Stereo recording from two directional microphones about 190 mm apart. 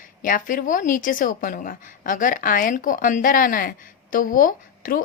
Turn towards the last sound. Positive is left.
turn(degrees=45)  # may be behind; listen again after turning